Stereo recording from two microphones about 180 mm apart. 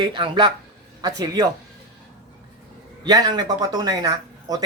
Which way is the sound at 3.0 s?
20° right (ahead or behind).